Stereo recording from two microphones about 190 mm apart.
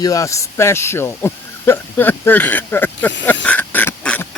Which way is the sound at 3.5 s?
10° left (ahead or behind).